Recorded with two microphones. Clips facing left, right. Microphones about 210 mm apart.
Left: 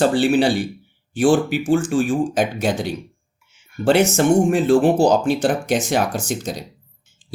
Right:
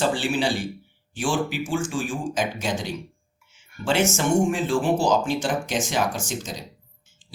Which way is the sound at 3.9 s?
35° left (ahead or behind).